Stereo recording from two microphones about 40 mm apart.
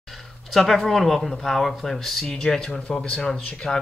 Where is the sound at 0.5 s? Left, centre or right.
Centre.